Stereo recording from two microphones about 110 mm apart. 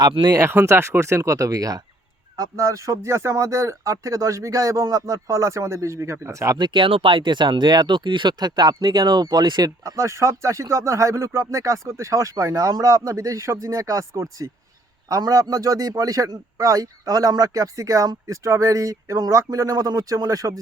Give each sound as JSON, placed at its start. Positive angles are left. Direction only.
{"t": 0.1, "sound": "speech", "side_deg": -40}
{"t": 0.3, "sound": "speech", "side_deg": -25}
{"t": 6.6, "sound": "speech", "side_deg": -45}
{"t": 9.8, "sound": "a man's voice", "side_deg": -30}